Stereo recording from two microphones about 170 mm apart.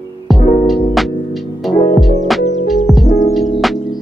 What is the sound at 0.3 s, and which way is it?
Music, centre (ahead or behind).